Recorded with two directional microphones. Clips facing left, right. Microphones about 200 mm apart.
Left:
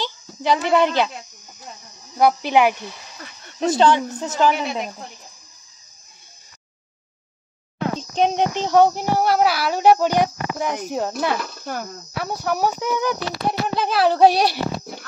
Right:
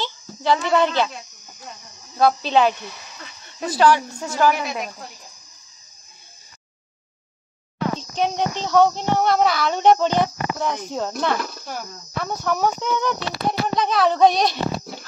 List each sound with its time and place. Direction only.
0.0 s speech: 15° left (ahead or behind)
2.1 s a woman's voice: 15° left (ahead or behind)
8.4 s speech: 15° left (ahead or behind)